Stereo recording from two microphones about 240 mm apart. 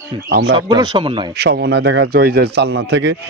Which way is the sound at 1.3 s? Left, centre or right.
Right.